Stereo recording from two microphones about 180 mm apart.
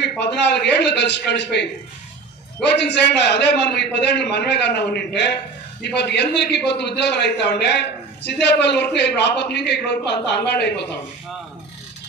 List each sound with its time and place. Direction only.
0.0 s a man's voice: 70° left (ahead or behind)